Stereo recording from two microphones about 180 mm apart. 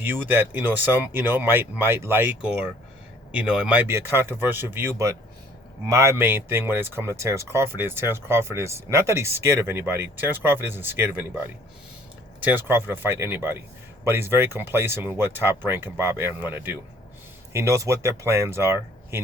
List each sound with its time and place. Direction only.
0.0 s speech: 10° right (ahead or behind)